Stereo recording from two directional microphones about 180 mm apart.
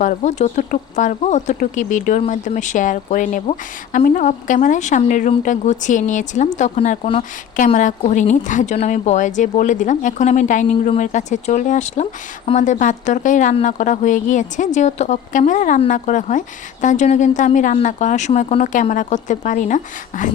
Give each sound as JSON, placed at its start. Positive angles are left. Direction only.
{"t": 0.0, "sound": "a woman's voice", "side_deg": 45}